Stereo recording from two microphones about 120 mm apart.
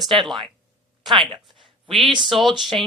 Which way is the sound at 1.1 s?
40° right (ahead or behind).